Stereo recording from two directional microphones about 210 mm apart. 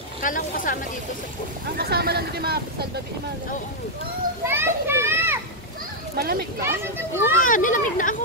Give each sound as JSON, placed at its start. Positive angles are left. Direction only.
{"t": 0.2, "sound": "speech", "side_deg": 40}
{"t": 1.8, "sound": "speech", "side_deg": -50}
{"t": 4.5, "sound": "children playing", "side_deg": -10}
{"t": 6.1, "sound": "speech", "side_deg": -50}
{"t": 6.6, "sound": "speech", "side_deg": -10}
{"t": 7.3, "sound": "speech", "side_deg": 40}